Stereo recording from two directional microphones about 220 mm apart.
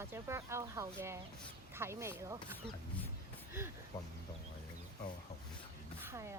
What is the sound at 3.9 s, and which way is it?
Speech, 15° left (ahead or behind).